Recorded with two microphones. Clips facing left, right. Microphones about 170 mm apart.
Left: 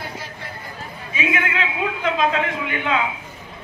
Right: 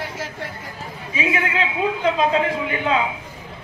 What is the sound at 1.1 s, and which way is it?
A man's voice, 30° right (ahead or behind).